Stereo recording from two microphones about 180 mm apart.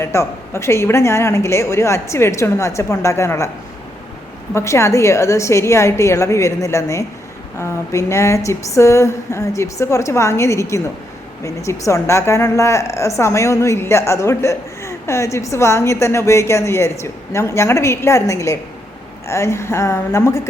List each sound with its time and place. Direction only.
0.0 s a woman's voice: 15° left (ahead or behind)
4.5 s a woman's voice: 15° left (ahead or behind)